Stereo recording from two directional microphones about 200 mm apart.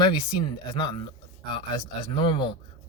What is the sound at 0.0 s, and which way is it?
Speech, 20° left (ahead or behind).